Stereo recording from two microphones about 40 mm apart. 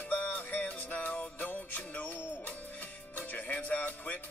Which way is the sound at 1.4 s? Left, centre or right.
Left.